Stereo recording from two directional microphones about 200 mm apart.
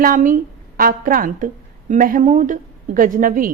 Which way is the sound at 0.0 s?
40° right (ahead or behind).